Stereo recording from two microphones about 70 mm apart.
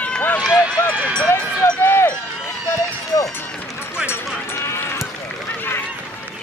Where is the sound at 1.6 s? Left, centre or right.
Left.